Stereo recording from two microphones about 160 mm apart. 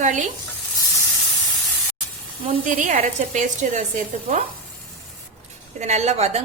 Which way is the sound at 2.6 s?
50° right (ahead or behind).